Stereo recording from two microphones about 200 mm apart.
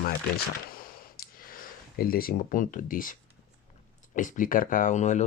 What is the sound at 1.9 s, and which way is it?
Speech, 45° left (ahead or behind).